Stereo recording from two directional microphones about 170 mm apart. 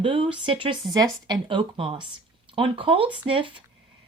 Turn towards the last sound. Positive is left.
turn(degrees=-30)  # may be behind; listen again after turning